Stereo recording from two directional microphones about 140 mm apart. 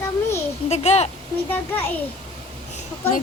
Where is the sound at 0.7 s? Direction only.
50° left (ahead or behind).